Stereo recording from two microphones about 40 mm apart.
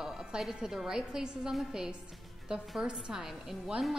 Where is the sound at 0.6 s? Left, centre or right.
Centre.